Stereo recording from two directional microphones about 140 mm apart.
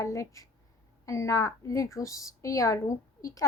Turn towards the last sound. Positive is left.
turn(degrees=25)  # may be behind; listen again after turning